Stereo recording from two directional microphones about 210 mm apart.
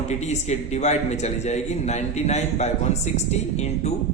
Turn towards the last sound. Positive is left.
turn(degrees=30)  # may be behind; listen again after turning